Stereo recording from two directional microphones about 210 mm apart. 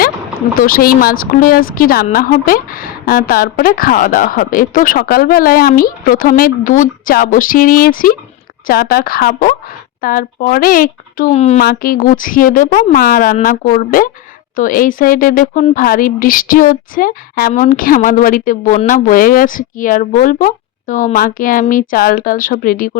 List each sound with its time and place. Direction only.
0.5 s speech: 45° left (ahead or behind)
11.6 s speech: 45° left (ahead or behind)